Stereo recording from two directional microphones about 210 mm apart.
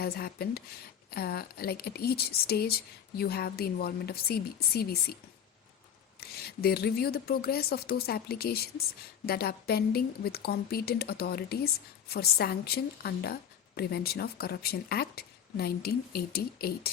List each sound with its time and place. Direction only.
0.0 s a woman's voice: 50° left (ahead or behind)
6.1 s a woman's voice: 45° left (ahead or behind)